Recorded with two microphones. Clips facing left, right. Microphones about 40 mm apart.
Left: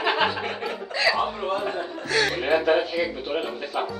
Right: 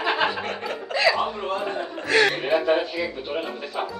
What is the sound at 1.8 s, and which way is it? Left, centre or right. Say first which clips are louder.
Chuckle: right 4 dB; right.